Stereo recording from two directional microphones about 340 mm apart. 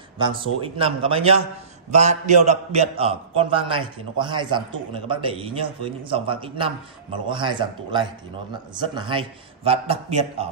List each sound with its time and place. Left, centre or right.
0.2 s a man's voice: centre